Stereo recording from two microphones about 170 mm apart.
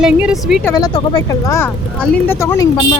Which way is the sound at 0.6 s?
20° left (ahead or behind).